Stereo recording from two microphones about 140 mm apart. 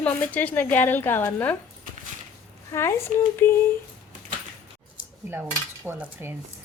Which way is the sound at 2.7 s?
20° left (ahead or behind).